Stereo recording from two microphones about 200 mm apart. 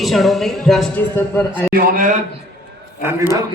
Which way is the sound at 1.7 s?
45° right (ahead or behind).